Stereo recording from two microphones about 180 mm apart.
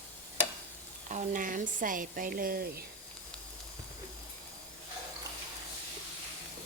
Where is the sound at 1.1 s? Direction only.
45° right (ahead or behind).